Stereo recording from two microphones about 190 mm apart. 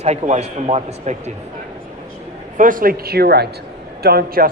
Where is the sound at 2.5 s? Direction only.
45° right (ahead or behind).